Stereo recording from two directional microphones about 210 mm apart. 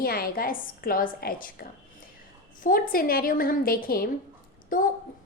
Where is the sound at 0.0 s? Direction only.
45° left (ahead or behind).